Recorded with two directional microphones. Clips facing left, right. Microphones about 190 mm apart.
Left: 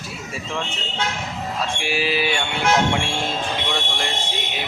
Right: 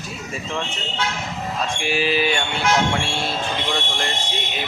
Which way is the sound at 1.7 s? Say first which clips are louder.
Right 3 dB; 10° left (ahead or behind).